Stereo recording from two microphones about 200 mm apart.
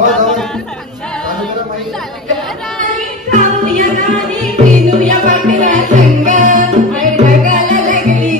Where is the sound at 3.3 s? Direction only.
40° right (ahead or behind).